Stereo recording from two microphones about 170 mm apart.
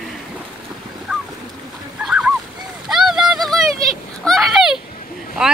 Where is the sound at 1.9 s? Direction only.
5° right (ahead or behind).